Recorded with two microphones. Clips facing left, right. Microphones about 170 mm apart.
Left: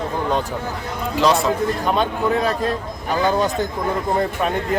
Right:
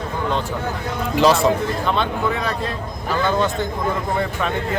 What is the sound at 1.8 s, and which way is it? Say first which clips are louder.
Speech: left 2 dB; 40° left (ahead or behind).